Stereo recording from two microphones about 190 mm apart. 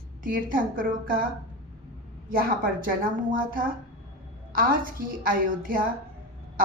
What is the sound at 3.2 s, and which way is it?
A woman's voice, 45° right (ahead or behind).